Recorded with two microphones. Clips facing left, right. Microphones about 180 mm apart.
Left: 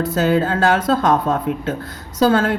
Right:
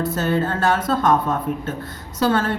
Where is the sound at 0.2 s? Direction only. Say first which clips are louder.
Left 6 dB; 90° left.